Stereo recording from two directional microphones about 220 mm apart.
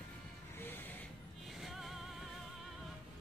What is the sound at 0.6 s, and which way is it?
Music, 10° left (ahead or behind).